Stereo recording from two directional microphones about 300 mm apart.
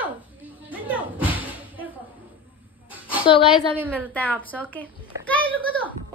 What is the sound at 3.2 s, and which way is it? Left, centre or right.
Speech, centre.